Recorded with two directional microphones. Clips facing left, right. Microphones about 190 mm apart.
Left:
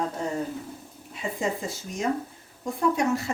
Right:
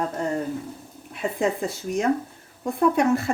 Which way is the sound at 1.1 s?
60° right (ahead or behind).